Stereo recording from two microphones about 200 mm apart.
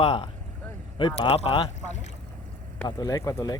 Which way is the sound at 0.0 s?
25° left (ahead or behind).